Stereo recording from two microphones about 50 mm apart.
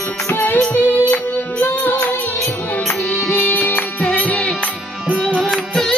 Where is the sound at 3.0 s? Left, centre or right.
Centre.